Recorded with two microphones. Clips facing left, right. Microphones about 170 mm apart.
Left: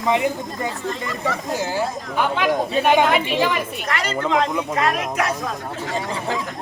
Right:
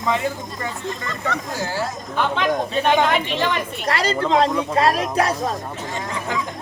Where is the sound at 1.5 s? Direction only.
20° left (ahead or behind).